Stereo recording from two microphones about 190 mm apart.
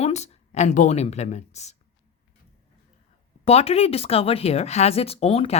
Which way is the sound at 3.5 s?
30° left (ahead or behind).